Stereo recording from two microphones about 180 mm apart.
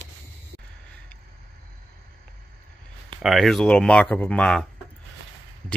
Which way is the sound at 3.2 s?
Centre (ahead or behind).